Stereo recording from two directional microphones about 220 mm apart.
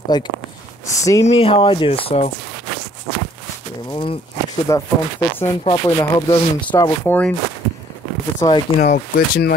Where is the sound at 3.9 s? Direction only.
25° left (ahead or behind).